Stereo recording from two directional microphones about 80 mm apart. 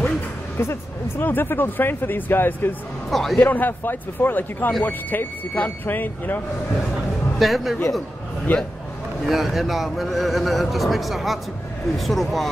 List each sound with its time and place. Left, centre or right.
0.6 s speech: left
3.1 s speech: centre
3.3 s speech: left
7.3 s speech: centre
8.5 s speech: left
9.2 s speech: centre